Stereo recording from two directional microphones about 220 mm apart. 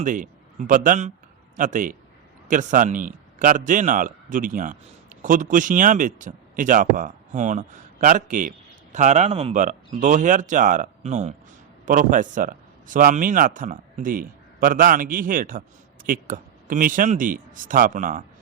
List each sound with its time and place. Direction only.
0.0 s speech: 35° right (ahead or behind)